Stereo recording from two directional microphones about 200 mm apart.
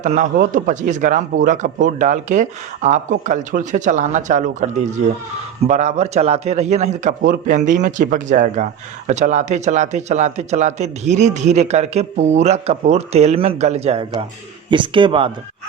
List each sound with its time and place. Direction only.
0.0 s a man's voice: 40° right (ahead or behind)